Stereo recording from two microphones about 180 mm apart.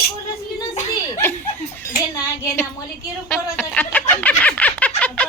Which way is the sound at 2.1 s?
15° left (ahead or behind).